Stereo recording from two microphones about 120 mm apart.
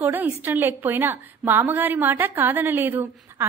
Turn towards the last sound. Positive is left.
turn(degrees=-15)  # may be behind; listen again after turning